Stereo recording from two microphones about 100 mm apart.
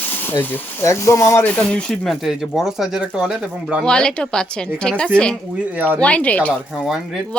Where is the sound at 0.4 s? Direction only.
20° left (ahead or behind).